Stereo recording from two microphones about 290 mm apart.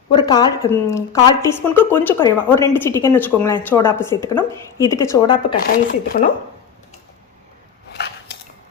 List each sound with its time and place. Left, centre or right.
0.1 s a woman's voice: centre
5.5 s speech: left
7.9 s scissors: left